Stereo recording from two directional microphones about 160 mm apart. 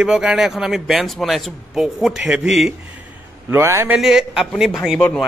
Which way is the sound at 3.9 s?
5° right (ahead or behind).